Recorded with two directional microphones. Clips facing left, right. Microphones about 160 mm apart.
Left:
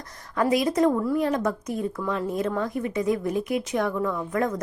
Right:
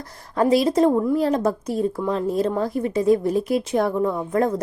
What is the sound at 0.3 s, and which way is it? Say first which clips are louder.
A woman's voice: right 4 dB; 30° right (ahead or behind).